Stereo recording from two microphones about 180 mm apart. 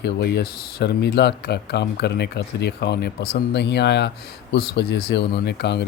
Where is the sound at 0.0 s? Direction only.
65° left (ahead or behind).